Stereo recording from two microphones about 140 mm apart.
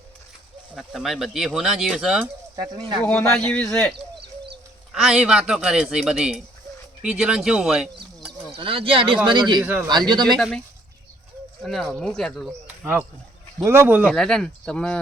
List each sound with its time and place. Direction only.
0.8 s a man's voice: centre (ahead or behind)
2.6 s speech: 30° right (ahead or behind)
3.0 s a man's voice: 10° left (ahead or behind)
8.5 s speech: 40° right (ahead or behind)
10.3 s a man's voice: centre (ahead or behind)
11.6 s a man's voice: centre (ahead or behind)
12.6 s a sound: 10° right (ahead or behind)
13.7 s speech: 15° right (ahead or behind)
14.1 s a man's voice: 5° left (ahead or behind)